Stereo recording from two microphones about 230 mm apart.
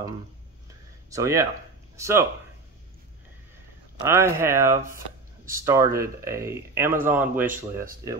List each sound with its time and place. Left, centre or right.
1.1 s speech: centre
4.0 s speech: centre